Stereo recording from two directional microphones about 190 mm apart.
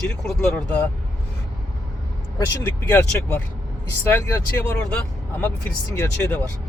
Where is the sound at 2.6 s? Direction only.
15° left (ahead or behind).